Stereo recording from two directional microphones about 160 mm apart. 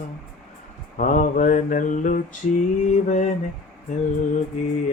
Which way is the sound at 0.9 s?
50° left (ahead or behind).